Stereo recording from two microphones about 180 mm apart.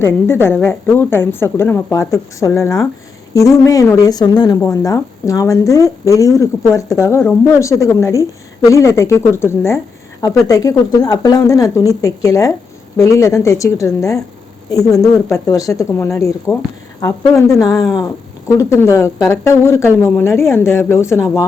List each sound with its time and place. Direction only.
0.0 s speech: 15° left (ahead or behind)